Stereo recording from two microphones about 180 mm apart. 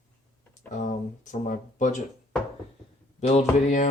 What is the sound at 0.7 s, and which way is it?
Speech, 45° left (ahead or behind).